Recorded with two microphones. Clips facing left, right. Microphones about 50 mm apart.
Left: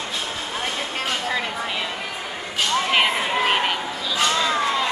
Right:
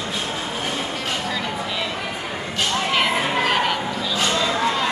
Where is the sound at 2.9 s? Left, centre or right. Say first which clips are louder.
Right 1 dB; centre.